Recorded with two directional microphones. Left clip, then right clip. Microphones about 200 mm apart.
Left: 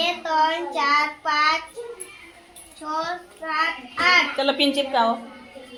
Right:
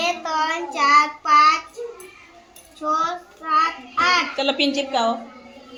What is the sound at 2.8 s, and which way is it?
Child singing, 10° left (ahead or behind).